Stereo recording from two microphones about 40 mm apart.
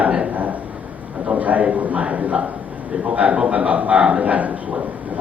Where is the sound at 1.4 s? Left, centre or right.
Right.